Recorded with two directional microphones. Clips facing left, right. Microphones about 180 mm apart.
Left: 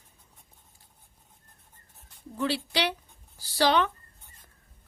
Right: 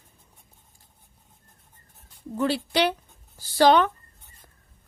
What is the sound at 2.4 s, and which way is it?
A woman's voice, 45° right (ahead or behind).